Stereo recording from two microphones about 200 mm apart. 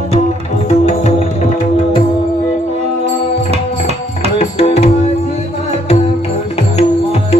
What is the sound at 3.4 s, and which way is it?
Music, 30° right (ahead or behind).